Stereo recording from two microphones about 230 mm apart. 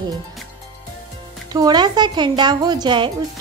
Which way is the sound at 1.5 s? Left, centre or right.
Centre.